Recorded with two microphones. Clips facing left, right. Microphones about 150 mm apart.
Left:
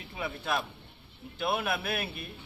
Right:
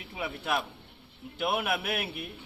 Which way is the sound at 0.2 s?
15° right (ahead or behind).